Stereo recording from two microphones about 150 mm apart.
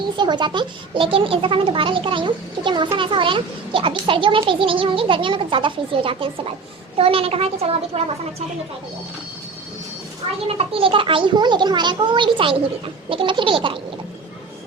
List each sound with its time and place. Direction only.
0.2 s a child's voice: 30° right (ahead or behind)
10.4 s a child's voice: 40° right (ahead or behind)